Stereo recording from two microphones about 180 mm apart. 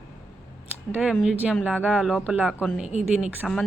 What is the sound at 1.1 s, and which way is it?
Speech, 5° right (ahead or behind).